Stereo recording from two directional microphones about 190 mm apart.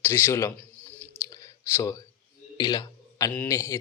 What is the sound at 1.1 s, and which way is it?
Clicking, 20° left (ahead or behind).